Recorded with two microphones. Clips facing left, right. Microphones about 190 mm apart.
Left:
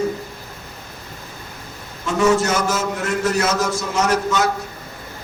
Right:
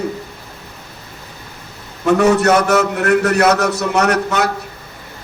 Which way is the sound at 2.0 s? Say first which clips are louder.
Right 5 dB; 65° right (ahead or behind).